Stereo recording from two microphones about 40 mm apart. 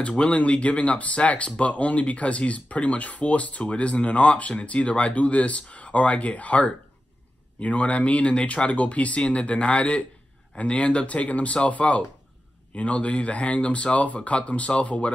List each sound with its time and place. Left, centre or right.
0.0 s speech: left